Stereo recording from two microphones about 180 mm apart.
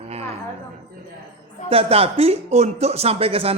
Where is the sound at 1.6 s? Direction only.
30° right (ahead or behind).